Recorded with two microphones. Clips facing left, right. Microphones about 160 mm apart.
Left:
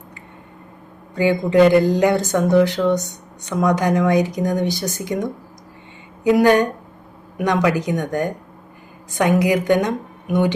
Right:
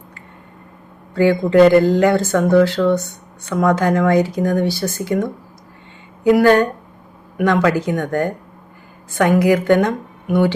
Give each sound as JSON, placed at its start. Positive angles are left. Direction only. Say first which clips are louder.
{"t": 1.1, "sound": "speech", "louder": "right 3 dB", "side_deg": 15}
{"t": 9.4, "sound": "speech", "louder": "right 3 dB", "side_deg": 15}